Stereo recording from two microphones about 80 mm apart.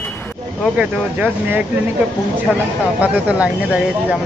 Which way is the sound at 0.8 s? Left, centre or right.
Right.